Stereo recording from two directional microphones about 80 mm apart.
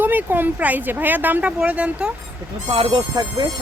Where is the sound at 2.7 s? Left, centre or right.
Right.